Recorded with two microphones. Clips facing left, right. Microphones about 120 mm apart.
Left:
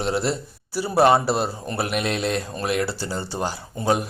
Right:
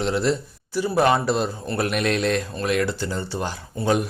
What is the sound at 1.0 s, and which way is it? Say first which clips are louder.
Speech: left 3 dB; 30° left (ahead or behind).